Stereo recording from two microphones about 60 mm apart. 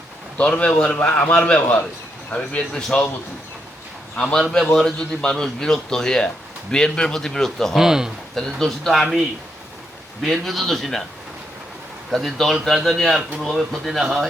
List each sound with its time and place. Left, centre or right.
0.3 s a man's voice: centre
4.1 s a man's voice: centre
7.8 s speech: centre
8.4 s a man's voice: centre
10.2 s a man's voice: centre
12.1 s a man's voice: centre